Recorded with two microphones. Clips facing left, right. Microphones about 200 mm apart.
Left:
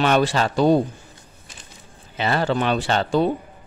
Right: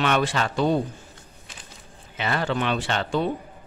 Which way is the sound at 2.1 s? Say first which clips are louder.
Left 4 dB; 35° left (ahead or behind).